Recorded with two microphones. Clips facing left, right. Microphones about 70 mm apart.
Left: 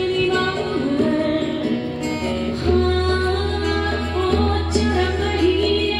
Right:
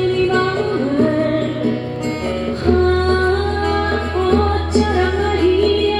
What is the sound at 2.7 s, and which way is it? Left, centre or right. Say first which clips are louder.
Music: right 4 dB; right.